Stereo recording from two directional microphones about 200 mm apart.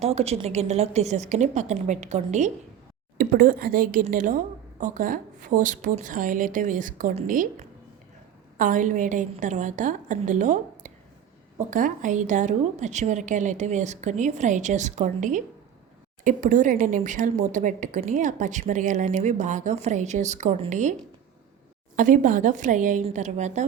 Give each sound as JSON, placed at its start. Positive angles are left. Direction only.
{"t": 0.0, "sound": "a woman's voice", "side_deg": -30}
{"t": 21.9, "sound": "a woman's voice", "side_deg": -40}